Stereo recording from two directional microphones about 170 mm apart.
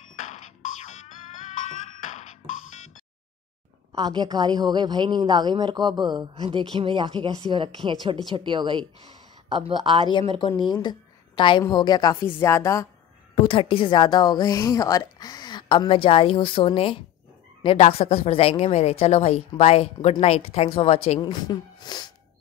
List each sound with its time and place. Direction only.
0.2 s music: 45° left (ahead or behind)
3.9 s a woman's voice: 25° right (ahead or behind)
10.7 s a woman's voice: 25° left (ahead or behind)
13.3 s a woman's voice: 30° left (ahead or behind)